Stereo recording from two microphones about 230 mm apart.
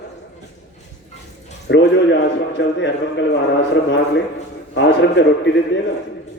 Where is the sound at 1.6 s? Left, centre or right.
Left.